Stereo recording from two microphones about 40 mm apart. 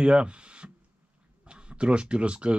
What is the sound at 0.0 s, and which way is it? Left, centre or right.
Speech, right.